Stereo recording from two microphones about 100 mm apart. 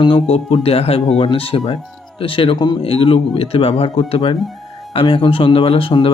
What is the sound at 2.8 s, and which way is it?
Speech, 65° left (ahead or behind).